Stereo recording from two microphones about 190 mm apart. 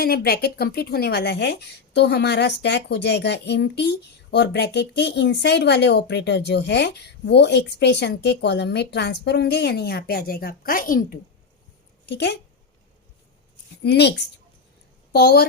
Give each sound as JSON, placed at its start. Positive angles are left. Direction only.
{"t": 0.0, "sound": "a woman's voice", "side_deg": 55}
{"t": 12.0, "sound": "a woman's voice", "side_deg": 60}
{"t": 13.8, "sound": "a woman's voice", "side_deg": 60}
{"t": 15.1, "sound": "a woman's voice", "side_deg": 55}